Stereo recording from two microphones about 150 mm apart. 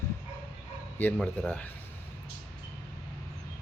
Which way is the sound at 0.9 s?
10° left (ahead or behind).